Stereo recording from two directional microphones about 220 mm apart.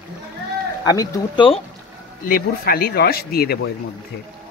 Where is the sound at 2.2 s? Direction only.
40° left (ahead or behind).